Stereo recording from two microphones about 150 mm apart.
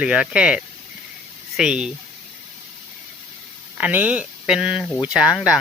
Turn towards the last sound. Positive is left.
turn(degrees=-5)  # may be behind; listen again after turning